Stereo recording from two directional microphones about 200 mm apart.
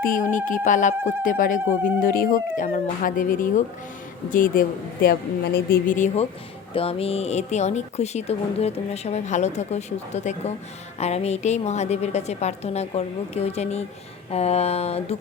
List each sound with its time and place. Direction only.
0.0 s a woman's voice: 40° left (ahead or behind)
6.7 s speech: 30° left (ahead or behind)